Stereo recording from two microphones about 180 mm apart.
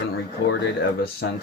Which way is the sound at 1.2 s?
90° left.